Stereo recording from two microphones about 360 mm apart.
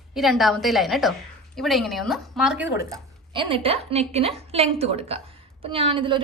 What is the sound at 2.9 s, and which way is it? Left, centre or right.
A woman's voice, centre.